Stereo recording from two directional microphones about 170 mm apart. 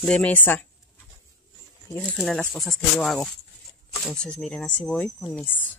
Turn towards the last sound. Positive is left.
turn(degrees=10)  # may be behind; listen again after turning